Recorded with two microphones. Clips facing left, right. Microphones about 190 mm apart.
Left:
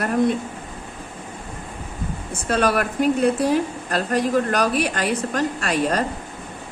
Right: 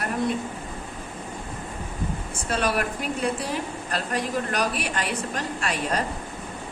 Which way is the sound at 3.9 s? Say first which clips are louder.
Left 7 dB; 45° left (ahead or behind).